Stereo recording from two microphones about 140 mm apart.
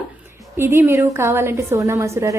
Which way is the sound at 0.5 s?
15° right (ahead or behind).